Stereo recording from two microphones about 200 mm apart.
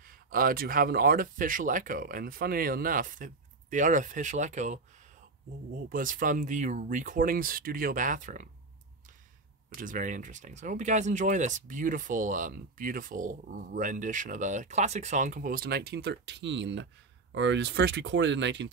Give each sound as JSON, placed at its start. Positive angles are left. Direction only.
{"t": 0.0, "sound": "speech", "side_deg": -45}
{"t": 5.8, "sound": "speech", "side_deg": -45}
{"t": 9.8, "sound": "speech", "side_deg": -40}